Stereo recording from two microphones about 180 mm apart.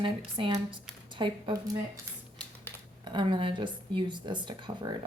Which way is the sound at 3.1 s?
25° right (ahead or behind).